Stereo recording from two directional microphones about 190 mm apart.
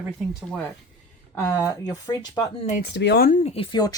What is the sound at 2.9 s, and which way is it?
Speech, 60° left (ahead or behind).